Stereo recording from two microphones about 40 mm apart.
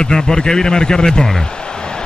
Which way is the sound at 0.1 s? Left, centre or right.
Centre.